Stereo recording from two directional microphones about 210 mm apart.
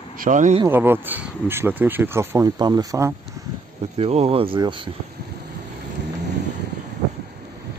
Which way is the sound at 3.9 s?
30° right (ahead or behind).